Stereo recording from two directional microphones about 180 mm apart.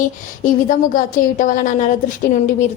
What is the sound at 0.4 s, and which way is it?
A woman's voice, 45° left (ahead or behind).